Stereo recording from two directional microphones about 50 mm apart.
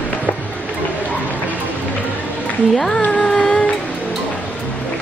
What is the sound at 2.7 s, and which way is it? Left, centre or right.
Speech, centre.